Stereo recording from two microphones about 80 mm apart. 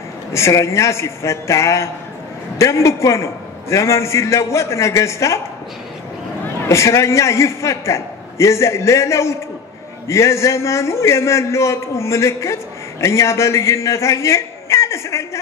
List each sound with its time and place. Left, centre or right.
0.3 s a man's voice: left
6.7 s a man's voice: left